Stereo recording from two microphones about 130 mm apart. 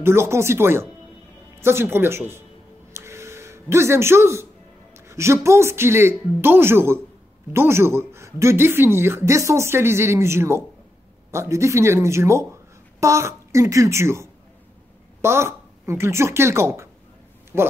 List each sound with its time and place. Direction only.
0.0 s speech: 20° right (ahead or behind)
2.9 s a sound: 20° right (ahead or behind)
4.9 s speech: 20° right (ahead or behind)